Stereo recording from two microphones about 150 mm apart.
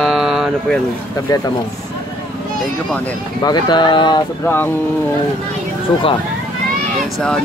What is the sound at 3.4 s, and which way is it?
Speech, 30° left (ahead or behind).